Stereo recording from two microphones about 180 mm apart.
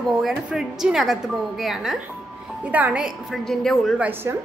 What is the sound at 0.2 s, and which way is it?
A woman's voice, centre (ahead or behind).